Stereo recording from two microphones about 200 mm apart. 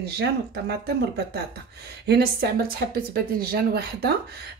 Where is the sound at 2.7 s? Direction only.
50° right (ahead or behind).